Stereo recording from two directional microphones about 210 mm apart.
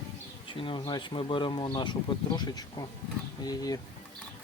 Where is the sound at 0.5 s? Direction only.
25° left (ahead or behind).